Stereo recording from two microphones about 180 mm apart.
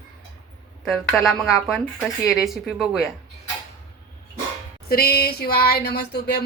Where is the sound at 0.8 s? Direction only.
Centre (ahead or behind).